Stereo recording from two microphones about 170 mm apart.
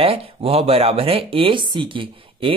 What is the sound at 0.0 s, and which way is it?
Speech, 35° right (ahead or behind).